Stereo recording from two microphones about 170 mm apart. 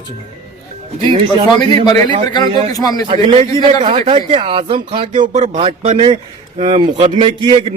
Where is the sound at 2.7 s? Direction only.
25° left (ahead or behind).